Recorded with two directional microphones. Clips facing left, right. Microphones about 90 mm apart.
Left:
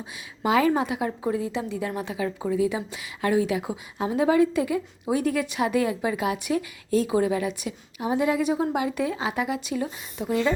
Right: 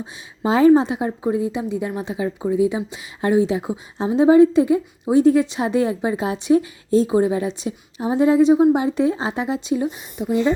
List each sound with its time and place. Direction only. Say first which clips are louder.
0.0 s a woman's voice: right 4 dB; 30° right (ahead or behind)